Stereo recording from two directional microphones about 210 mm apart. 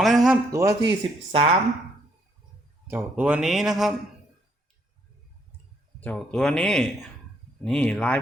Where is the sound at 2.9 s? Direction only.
10° right (ahead or behind).